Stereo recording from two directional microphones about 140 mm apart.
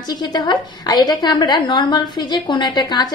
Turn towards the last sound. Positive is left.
turn(degrees=30)  # may be behind; listen again after turning